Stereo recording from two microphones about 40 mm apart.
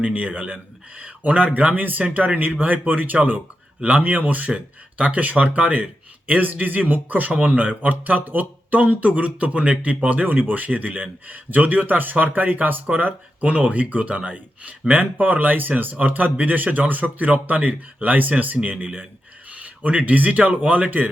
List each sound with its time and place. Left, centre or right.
0.0 s speech: right